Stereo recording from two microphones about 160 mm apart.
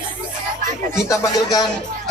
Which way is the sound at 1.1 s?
20° left (ahead or behind).